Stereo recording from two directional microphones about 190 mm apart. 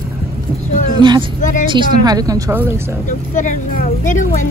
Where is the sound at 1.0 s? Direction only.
25° right (ahead or behind).